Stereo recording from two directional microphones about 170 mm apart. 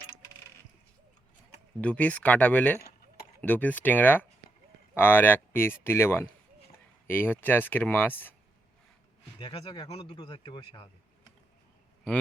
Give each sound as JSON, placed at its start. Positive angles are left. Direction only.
{"t": 1.8, "sound": "speech", "side_deg": 10}
{"t": 9.4, "sound": "speech", "side_deg": 30}